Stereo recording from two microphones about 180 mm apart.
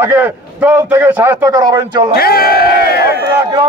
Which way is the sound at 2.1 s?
55° left (ahead or behind).